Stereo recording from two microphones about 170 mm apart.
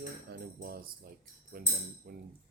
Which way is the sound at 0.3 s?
65° right (ahead or behind).